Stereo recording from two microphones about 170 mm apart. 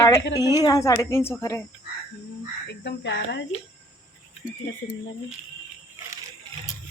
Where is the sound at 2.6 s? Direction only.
90° left.